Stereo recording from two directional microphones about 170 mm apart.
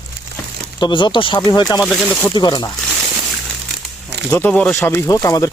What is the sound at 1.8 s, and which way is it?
Speech, 5° left (ahead or behind).